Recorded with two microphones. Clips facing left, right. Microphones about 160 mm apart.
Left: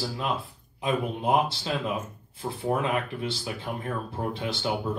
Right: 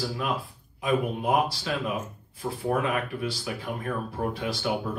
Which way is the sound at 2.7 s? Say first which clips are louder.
Even; 25° left (ahead or behind).